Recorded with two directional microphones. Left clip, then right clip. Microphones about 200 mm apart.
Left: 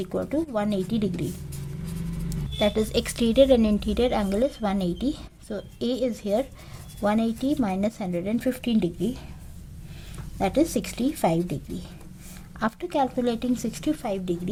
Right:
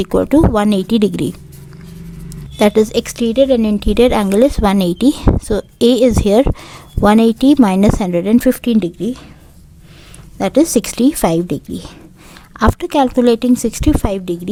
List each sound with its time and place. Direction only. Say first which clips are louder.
0.0 s a woman's voice: right 15 dB; 45° right (ahead or behind)
2.6 s a woman's voice: right 12 dB; 35° right (ahead or behind)
10.3 s a woman's voice: right 11 dB; 40° right (ahead or behind)